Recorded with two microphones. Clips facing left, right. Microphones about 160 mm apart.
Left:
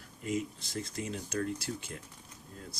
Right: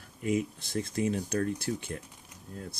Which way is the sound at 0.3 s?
60° right (ahead or behind).